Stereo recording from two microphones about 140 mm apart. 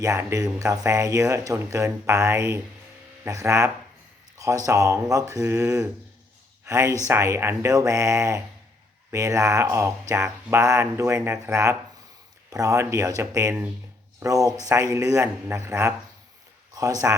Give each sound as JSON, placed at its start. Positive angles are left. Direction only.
{"t": 0.0, "sound": "speech", "side_deg": -20}